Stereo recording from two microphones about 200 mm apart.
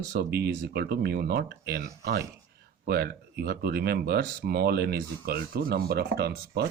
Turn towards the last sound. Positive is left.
turn(degrees=-55)  # may be behind; listen again after turning